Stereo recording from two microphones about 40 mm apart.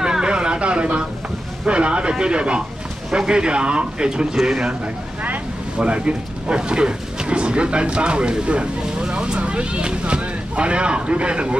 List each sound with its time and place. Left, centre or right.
0.0 s a sound: right
1.7 s a man's voice: right
5.8 s speech: right